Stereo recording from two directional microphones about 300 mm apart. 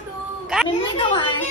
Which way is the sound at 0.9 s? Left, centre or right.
Centre.